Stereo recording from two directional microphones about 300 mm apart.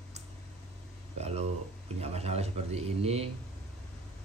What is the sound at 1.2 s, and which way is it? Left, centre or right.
Speech, right.